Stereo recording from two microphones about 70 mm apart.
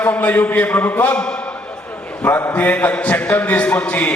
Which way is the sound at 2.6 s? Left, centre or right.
Left.